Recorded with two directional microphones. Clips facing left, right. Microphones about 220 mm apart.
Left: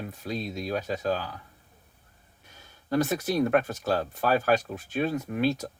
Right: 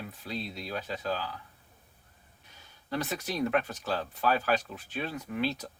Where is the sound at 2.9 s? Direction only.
45° left (ahead or behind).